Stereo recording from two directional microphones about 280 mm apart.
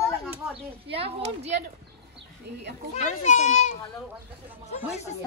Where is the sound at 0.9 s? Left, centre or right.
Right.